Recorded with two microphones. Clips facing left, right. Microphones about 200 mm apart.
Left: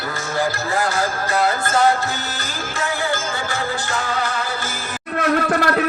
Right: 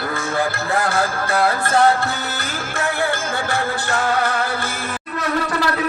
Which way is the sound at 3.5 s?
60° right (ahead or behind).